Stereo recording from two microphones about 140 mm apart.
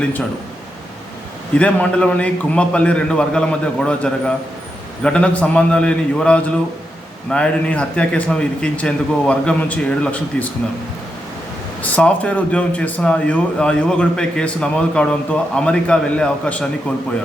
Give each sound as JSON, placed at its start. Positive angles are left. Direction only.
{"t": 1.5, "sound": "a man's voice", "side_deg": 10}
{"t": 11.8, "sound": "a man's voice", "side_deg": 10}